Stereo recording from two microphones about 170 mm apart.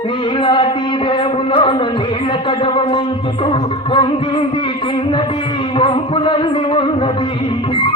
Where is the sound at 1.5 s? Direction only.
30° left (ahead or behind).